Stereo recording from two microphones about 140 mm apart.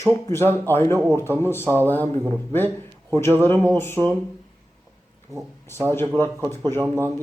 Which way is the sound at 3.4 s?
15° left (ahead or behind).